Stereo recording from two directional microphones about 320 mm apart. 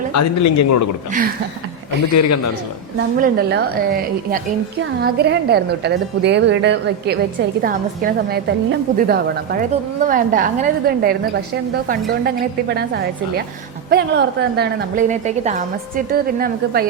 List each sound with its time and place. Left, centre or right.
0.1 s a man's voice: left
3.2 s a woman's voice: right